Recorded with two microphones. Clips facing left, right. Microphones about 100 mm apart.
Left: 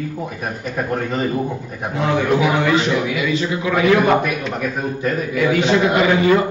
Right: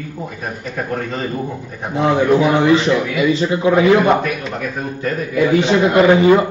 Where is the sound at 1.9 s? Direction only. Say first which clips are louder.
Right 4 dB; 35° right (ahead or behind).